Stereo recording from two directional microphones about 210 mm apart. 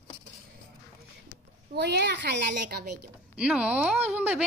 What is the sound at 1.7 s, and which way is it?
A child's voice, 55° right (ahead or behind).